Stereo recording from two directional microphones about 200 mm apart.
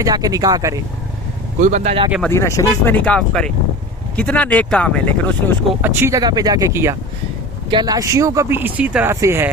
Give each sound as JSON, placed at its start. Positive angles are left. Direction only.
{"t": 0.0, "sound": "speech", "side_deg": -20}
{"t": 1.6, "sound": "speech", "side_deg": -35}
{"t": 2.2, "sound": "speech", "side_deg": 15}
{"t": 5.8, "sound": "speech", "side_deg": -10}